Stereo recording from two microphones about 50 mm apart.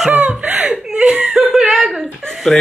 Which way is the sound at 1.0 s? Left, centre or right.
Right.